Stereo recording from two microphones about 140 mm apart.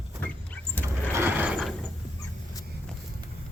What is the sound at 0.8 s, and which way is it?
Vehicle, 10° left (ahead or behind).